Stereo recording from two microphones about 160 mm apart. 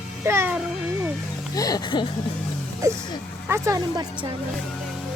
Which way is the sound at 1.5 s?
25° left (ahead or behind).